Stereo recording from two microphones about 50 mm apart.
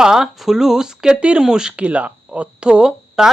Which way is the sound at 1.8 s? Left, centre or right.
Right.